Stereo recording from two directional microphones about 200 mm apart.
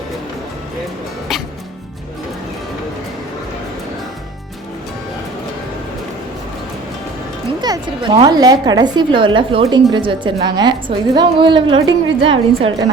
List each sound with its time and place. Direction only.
1.3 s music: centre (ahead or behind)
7.6 s a woman's voice: 20° right (ahead or behind)